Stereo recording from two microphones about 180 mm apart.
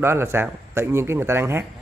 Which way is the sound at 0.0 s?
15° right (ahead or behind).